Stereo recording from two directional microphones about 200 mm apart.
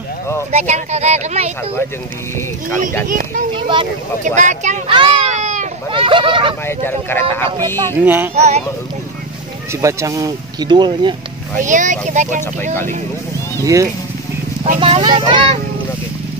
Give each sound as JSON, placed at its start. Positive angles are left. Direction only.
{"t": 0.5, "sound": "speech", "side_deg": -35}
{"t": 3.1, "sound": "speech", "side_deg": -45}
{"t": 3.5, "sound": "speech", "side_deg": -25}
{"t": 4.4, "sound": "speech", "side_deg": -35}
{"t": 4.9, "sound": "a sound", "side_deg": -25}
{"t": 6.6, "sound": "speech", "side_deg": 10}
{"t": 7.5, "sound": "speech", "side_deg": -15}
{"t": 8.4, "sound": "speech", "side_deg": -35}
{"t": 9.7, "sound": "speech", "side_deg": -15}
{"t": 11.6, "sound": "speech", "side_deg": -40}
{"t": 14.8, "sound": "speech", "side_deg": -25}